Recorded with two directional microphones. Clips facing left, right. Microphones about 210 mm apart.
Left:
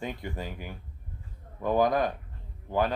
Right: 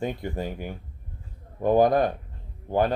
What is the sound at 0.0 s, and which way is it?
Speech, 40° right (ahead or behind).